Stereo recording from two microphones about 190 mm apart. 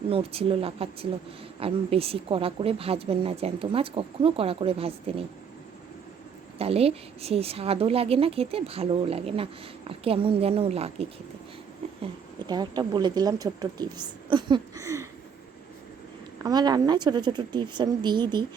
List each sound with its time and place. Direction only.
0.1 s a woman's voice: 30° right (ahead or behind)
6.6 s a woman's voice: 30° right (ahead or behind)
11.8 s a sound: 30° right (ahead or behind)
12.5 s a woman's voice: 20° right (ahead or behind)
16.4 s a woman's voice: 20° right (ahead or behind)